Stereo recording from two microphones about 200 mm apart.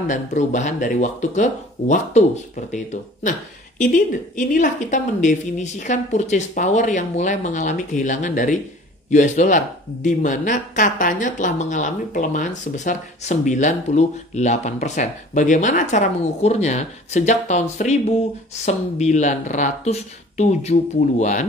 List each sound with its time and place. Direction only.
0.1 s speech: 35° left (ahead or behind)